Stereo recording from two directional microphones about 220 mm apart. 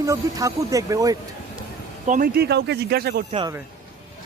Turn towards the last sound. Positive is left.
turn(degrees=-20)  # may be behind; listen again after turning